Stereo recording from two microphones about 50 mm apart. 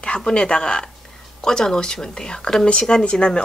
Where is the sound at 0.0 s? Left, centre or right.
Left.